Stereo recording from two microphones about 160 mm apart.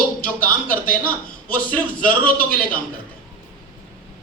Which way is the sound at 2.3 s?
60° left (ahead or behind).